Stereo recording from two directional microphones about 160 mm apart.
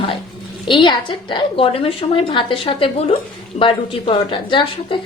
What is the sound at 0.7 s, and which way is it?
A woman's voice, 30° left (ahead or behind).